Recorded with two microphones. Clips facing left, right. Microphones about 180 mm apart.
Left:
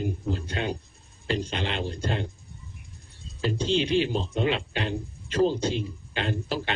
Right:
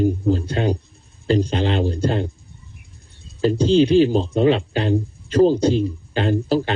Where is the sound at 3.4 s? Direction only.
35° right (ahead or behind).